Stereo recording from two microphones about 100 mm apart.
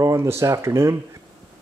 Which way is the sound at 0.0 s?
30° right (ahead or behind).